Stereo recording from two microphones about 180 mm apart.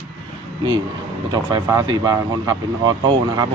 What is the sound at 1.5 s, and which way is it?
Speech, 20° right (ahead or behind).